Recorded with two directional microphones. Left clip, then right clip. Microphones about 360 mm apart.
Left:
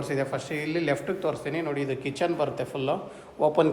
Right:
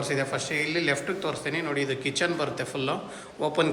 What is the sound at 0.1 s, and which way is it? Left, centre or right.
A man's voice, centre.